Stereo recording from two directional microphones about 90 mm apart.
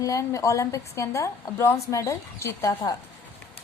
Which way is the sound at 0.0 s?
35° left (ahead or behind).